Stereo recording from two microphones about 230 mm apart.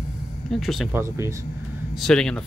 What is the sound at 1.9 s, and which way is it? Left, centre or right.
Speech, centre.